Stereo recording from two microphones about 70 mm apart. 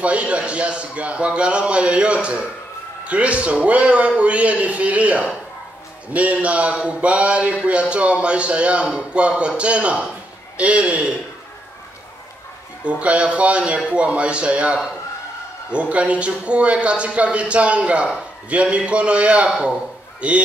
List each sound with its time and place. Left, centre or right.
0.0 s a man's voice: centre
6.3 s a man's voice: centre
12.8 s a man's voice: centre